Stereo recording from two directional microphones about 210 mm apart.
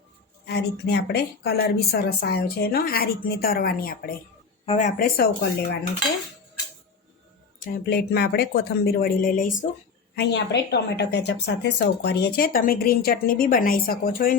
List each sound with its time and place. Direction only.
0.4 s a woman's voice: 50° left (ahead or behind)
4.6 s a woman's voice: 30° left (ahead or behind); by 5.6 s 50° left (ahead or behind)
7.6 s a woman's voice: 45° left (ahead or behind)
10.2 s a woman's voice: 55° left (ahead or behind)